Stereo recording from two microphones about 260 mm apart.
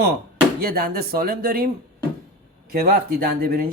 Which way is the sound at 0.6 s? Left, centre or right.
Right.